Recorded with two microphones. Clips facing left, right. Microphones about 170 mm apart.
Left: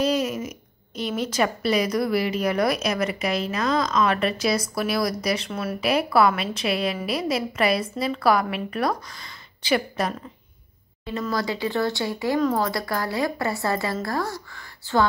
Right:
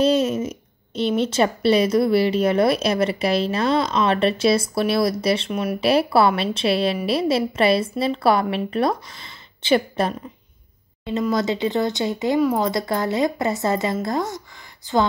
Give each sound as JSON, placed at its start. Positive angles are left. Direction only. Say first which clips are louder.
{"t": 0.0, "sound": "speech", "louder": "right 5 dB", "side_deg": -25}
{"t": 5.5, "sound": "speech", "louder": "right 5 dB", "side_deg": -15}
{"t": 5.8, "sound": "speech", "louder": "right 3 dB", "side_deg": -30}
{"t": 11.1, "sound": "speech", "louder": "right 5 dB", "side_deg": -20}
{"t": 12.4, "sound": "speech", "louder": "right 2 dB", "side_deg": -10}
{"t": 12.6, "sound": "speech", "louder": "right 4 dB", "side_deg": -20}